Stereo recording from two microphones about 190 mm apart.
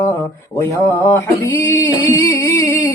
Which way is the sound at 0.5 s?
15° left (ahead or behind).